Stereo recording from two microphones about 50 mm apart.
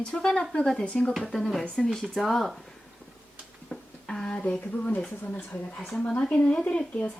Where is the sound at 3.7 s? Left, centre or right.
Centre; by 5.0 s left.